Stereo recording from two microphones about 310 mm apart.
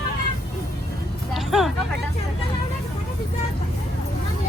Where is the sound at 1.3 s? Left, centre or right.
Centre.